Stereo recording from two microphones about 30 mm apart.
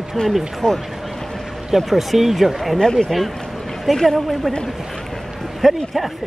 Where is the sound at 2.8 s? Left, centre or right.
Left.